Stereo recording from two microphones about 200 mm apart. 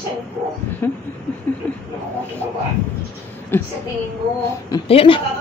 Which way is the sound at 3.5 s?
10° left (ahead or behind).